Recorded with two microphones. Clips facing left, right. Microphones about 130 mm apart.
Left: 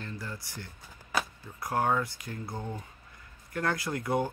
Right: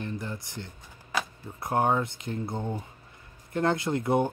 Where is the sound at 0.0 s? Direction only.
20° right (ahead or behind).